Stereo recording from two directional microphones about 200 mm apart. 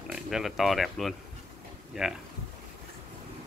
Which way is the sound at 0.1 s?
Centre (ahead or behind).